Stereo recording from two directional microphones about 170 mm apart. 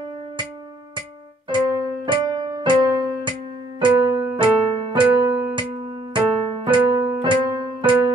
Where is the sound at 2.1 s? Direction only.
25° right (ahead or behind).